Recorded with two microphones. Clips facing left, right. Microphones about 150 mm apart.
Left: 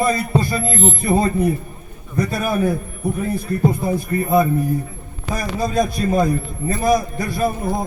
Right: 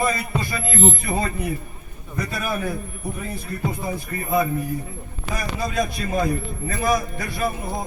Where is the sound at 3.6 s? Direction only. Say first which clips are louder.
Left 7 dB; 40° left (ahead or behind).